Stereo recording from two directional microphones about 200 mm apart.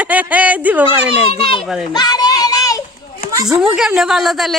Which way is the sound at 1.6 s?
Centre (ahead or behind).